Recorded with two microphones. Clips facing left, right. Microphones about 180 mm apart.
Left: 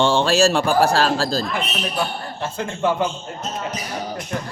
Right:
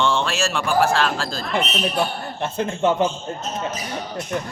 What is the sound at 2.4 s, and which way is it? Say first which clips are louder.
Speech: right 2 dB; 20° right (ahead or behind).